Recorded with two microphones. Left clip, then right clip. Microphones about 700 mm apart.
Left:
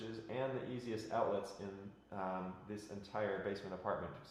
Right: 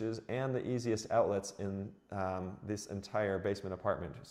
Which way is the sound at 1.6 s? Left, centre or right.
Right.